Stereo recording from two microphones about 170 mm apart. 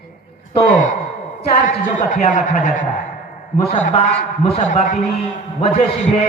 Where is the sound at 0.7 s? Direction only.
50° left (ahead or behind).